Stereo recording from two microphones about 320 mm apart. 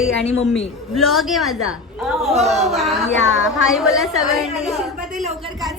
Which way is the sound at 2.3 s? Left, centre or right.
Centre.